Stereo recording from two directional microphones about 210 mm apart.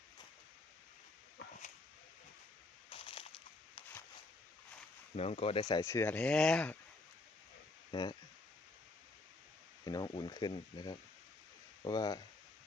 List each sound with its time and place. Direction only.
2.9 s a sound: 25° left (ahead or behind)
5.1 s speech: 30° left (ahead or behind); by 6.7 s 5° left (ahead or behind)
7.9 s speech: 20° left (ahead or behind)
9.8 s speech: 20° left (ahead or behind)